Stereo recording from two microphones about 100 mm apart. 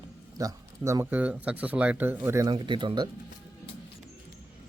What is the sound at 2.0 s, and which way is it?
Speech, 25° right (ahead or behind).